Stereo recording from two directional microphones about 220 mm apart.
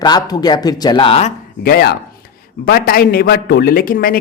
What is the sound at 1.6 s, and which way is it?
A man's voice, 45° left (ahead or behind).